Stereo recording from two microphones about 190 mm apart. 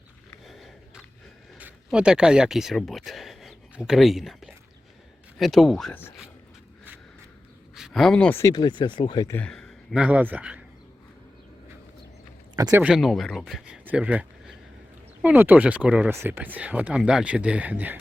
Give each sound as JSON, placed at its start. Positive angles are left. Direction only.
{"t": 0.4, "sound": "a sound", "side_deg": 0}
{"t": 1.5, "sound": "speech", "side_deg": -5}
{"t": 7.8, "sound": "speech", "side_deg": 0}
{"t": 9.3, "sound": "speech", "side_deg": 5}
{"t": 12.5, "sound": "speech", "side_deg": -20}
{"t": 12.8, "sound": "speech", "side_deg": 0}